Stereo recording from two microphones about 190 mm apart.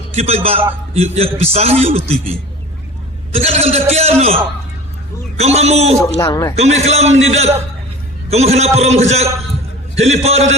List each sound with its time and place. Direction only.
0.2 s a man's voice: 30° right (ahead or behind)
3.3 s a man's voice: 30° right (ahead or behind)
5.4 s a man's voice: 35° right (ahead or behind)
6.1 s a man's voice: 20° left (ahead or behind)
6.6 s a man's voice: 35° right (ahead or behind)